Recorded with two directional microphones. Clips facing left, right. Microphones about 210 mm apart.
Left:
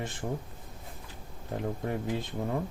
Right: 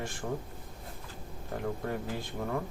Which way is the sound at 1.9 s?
20° left (ahead or behind).